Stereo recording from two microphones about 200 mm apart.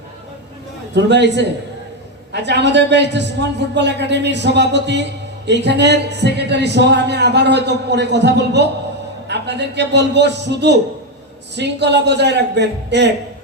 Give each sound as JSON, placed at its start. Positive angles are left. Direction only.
{"t": 0.9, "sound": "a man's voice", "side_deg": -60}